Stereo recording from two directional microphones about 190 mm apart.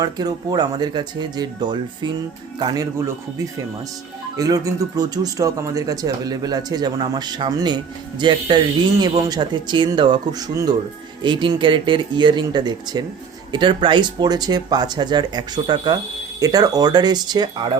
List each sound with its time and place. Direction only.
0.0 s speech: 20° right (ahead or behind)
4.4 s speech: 20° right (ahead or behind)